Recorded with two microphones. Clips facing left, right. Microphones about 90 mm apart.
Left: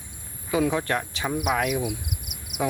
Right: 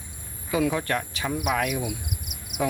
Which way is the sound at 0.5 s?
20° left (ahead or behind).